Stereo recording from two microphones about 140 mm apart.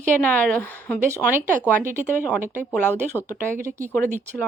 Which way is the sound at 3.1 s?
20° left (ahead or behind).